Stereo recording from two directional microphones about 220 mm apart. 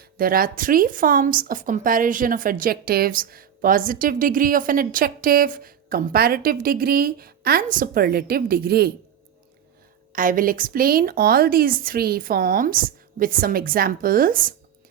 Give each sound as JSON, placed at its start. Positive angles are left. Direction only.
{"t": 0.0, "sound": "a woman's voice", "side_deg": -40}
{"t": 10.1, "sound": "a woman's voice", "side_deg": -40}